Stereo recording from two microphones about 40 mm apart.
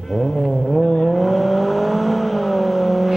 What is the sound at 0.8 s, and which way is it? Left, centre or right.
Vehicle, centre.